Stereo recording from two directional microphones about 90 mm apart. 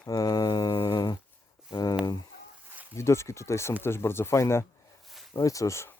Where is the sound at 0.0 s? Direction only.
45° left (ahead or behind).